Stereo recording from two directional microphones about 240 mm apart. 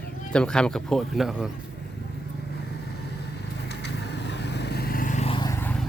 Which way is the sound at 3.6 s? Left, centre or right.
Left.